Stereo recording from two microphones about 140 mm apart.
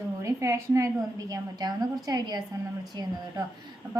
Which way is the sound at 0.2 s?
20° right (ahead or behind).